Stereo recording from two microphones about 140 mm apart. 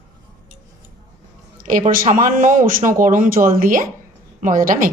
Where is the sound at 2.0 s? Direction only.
65° right (ahead or behind).